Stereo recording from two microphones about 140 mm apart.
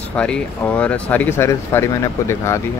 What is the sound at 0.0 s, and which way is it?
Speech, 10° left (ahead or behind).